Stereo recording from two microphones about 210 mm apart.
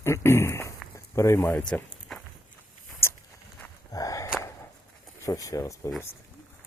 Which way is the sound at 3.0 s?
10° left (ahead or behind).